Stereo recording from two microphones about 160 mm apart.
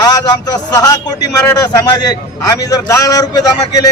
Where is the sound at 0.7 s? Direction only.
25° left (ahead or behind).